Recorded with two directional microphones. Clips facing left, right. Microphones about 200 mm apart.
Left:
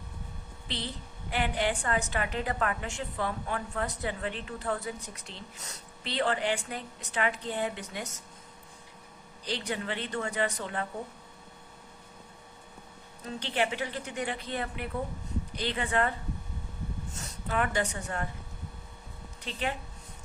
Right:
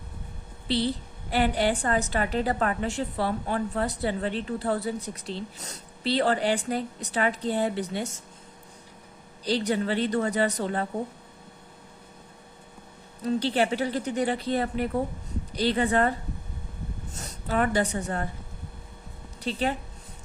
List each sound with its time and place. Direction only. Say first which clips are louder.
1.3 s a woman's voice: right 6 dB; 35° right (ahead or behind)
9.4 s a woman's voice: right 9 dB; 35° right (ahead or behind)
13.2 s a woman's voice: right 7 dB; 35° right (ahead or behind)
17.5 s a woman's voice: right 5 dB; 35° right (ahead or behind)
19.4 s speech: right 7 dB; 35° right (ahead or behind)